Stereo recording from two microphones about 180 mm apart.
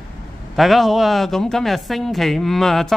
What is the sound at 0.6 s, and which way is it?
Speech, centre (ahead or behind).